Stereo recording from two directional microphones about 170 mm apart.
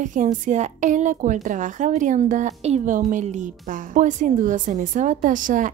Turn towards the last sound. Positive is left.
turn(degrees=-50)  # may be behind; listen again after turning